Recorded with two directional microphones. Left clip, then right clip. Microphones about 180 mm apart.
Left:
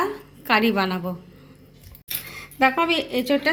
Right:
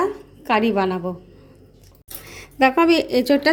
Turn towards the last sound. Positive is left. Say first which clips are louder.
# right 4 dB
turn(degrees=-55)  # may be behind; listen again after turning